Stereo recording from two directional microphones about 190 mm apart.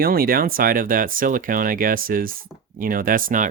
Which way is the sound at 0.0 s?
50° right (ahead or behind).